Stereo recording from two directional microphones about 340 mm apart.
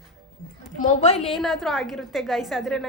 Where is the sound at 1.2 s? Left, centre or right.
Centre.